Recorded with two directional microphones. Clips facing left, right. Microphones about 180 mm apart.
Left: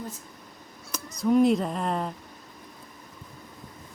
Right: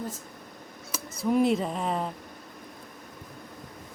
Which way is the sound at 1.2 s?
5° right (ahead or behind).